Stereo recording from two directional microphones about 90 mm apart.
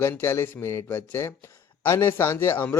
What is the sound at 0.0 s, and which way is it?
A man's voice, 25° left (ahead or behind).